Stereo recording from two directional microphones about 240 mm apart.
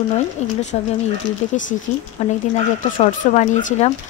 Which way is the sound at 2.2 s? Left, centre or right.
Left.